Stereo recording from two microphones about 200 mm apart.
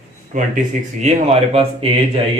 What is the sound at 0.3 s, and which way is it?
Speech, 35° right (ahead or behind).